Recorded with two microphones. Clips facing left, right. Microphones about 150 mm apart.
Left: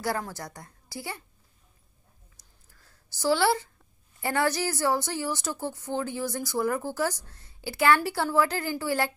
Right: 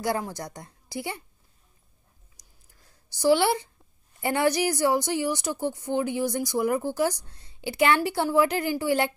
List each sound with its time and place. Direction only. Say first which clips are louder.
0.0 s a woman's voice: right 3 dB; 20° right (ahead or behind)
2.3 s a sound: even; 15° right (ahead or behind)
4.2 s a woman's voice: right 3 dB; 20° right (ahead or behind)